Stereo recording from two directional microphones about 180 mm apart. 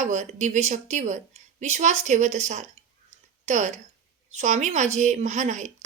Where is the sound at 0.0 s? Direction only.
40° right (ahead or behind).